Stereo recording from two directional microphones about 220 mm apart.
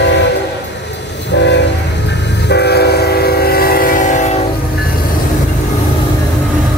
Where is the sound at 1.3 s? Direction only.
50° left (ahead or behind); by 4.5 s 30° left (ahead or behind).